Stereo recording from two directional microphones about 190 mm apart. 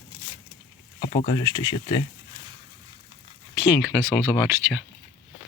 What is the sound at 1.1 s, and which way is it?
Speech, 30° left (ahead or behind).